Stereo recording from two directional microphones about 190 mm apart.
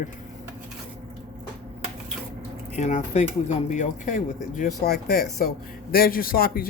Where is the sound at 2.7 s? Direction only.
35° left (ahead or behind).